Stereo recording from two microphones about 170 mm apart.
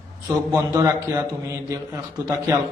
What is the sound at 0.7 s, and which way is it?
A man's voice, 15° right (ahead or behind).